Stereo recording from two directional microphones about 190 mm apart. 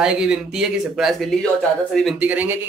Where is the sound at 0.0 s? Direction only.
5° right (ahead or behind).